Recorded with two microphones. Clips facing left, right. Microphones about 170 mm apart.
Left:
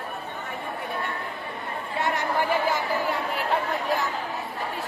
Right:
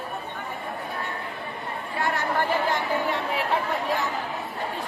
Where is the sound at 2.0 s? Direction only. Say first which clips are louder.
Even; 20° left (ahead or behind); by 3.4 s centre (ahead or behind).